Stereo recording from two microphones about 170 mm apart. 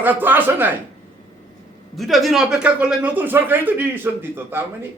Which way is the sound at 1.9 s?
Centre (ahead or behind).